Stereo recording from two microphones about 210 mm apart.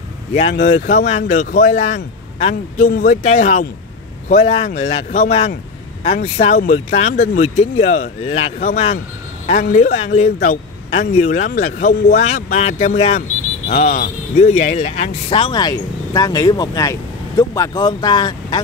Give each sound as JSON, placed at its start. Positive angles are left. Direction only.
{"t": 0.5, "sound": "speech", "side_deg": 65}
{"t": 0.8, "sound": "speech", "side_deg": 35}